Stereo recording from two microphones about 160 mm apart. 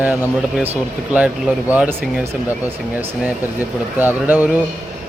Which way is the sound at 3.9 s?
10° right (ahead or behind).